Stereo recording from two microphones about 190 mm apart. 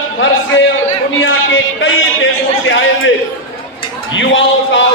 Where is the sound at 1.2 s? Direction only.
90° left.